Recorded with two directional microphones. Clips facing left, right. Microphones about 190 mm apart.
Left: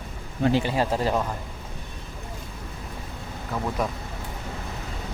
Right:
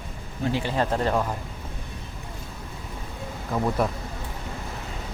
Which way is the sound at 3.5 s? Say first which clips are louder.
Right 4 dB; 15° right (ahead or behind).